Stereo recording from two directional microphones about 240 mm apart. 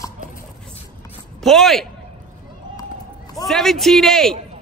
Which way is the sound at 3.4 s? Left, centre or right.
Centre.